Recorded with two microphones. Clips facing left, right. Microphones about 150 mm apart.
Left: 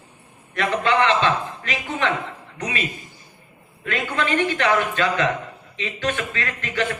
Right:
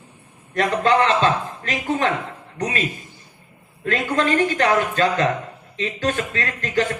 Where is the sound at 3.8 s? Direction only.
40° right (ahead or behind).